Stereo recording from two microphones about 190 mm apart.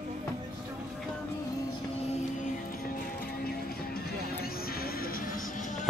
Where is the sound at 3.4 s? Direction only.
55° left (ahead or behind).